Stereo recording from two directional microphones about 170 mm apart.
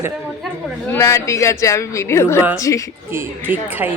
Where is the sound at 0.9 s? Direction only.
15° left (ahead or behind).